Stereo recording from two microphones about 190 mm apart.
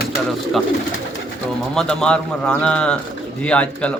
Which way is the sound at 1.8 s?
5° left (ahead or behind).